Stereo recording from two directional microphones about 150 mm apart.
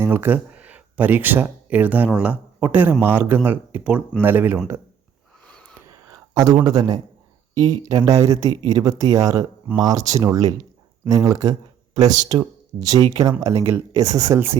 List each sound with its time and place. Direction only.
0.0 s a man's voice: 15° right (ahead or behind)
5.5 s a sound: 5° left (ahead or behind)
6.1 s speech: 25° right (ahead or behind)
13.7 s speech: 20° right (ahead or behind)